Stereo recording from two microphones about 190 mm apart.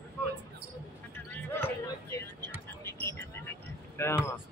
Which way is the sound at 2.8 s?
10° left (ahead or behind).